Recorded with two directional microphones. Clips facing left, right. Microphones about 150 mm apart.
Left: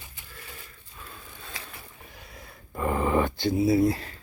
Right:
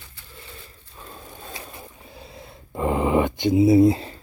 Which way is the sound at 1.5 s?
25° right (ahead or behind).